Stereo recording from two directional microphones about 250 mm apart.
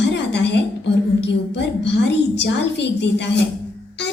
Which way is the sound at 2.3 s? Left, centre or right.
Left.